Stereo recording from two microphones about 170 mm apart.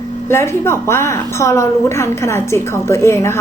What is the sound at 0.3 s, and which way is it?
Speech, 15° left (ahead or behind).